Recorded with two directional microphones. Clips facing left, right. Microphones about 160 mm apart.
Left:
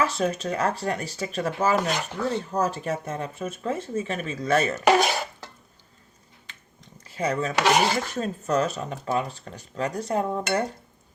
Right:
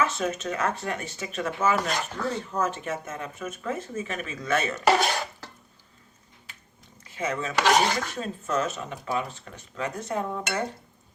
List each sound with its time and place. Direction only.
0.0 s speech: 35° left (ahead or behind)
4.9 s speech: 5° left (ahead or behind)
7.2 s speech: 35° left (ahead or behind)